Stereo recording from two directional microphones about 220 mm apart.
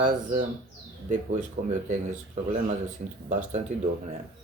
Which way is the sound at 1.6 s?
45° right (ahead or behind).